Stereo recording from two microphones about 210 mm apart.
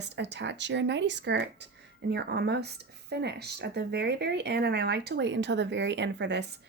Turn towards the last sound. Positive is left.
turn(degrees=-55)  # may be behind; listen again after turning